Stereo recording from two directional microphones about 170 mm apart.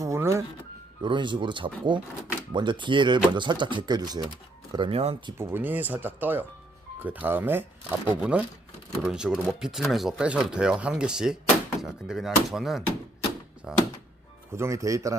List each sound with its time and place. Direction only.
0.0 s music: 15° right (ahead or behind)
1.0 s speech: 30° right (ahead or behind)
5.4 s speech: 15° right (ahead or behind)
14.5 s speech: 15° right (ahead or behind)